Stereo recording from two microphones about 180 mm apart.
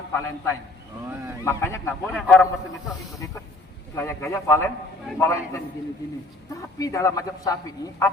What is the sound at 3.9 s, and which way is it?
A man's voice, 15° left (ahead or behind).